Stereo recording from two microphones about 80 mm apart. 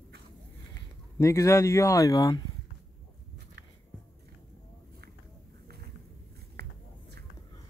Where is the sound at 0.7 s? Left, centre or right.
Left.